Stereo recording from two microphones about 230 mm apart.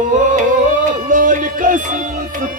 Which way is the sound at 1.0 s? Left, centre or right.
Right.